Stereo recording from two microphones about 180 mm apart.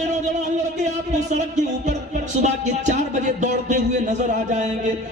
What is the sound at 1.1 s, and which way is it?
Music, 40° right (ahead or behind).